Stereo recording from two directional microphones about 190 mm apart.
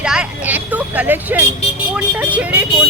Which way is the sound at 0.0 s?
5° right (ahead or behind).